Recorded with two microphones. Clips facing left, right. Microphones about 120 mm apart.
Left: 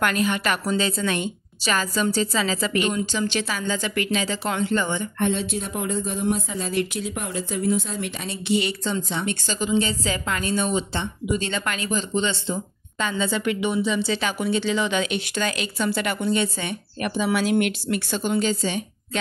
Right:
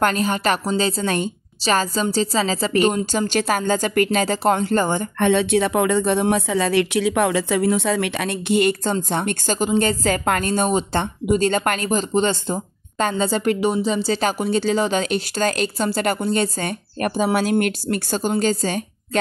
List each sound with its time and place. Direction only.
0.0 s a woman's voice: 35° right (ahead or behind)
5.2 s speech: 70° right (ahead or behind); by 18.9 s 45° right (ahead or behind)